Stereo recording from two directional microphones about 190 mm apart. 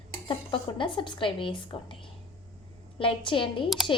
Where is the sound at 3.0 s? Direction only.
25° left (ahead or behind).